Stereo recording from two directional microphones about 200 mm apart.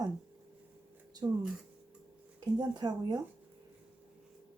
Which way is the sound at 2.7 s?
20° right (ahead or behind).